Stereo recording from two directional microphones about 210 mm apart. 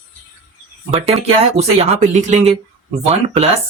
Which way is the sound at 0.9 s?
30° right (ahead or behind).